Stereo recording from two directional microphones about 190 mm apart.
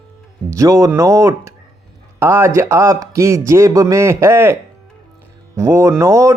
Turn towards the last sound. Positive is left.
turn(degrees=-15)  # may be behind; listen again after turning